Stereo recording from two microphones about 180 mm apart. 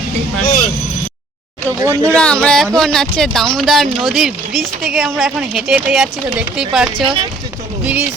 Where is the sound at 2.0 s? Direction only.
5° left (ahead or behind).